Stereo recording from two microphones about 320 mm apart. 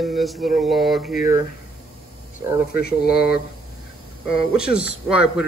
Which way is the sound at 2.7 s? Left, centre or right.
Left.